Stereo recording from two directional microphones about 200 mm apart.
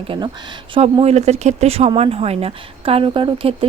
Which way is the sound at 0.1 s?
25° right (ahead or behind).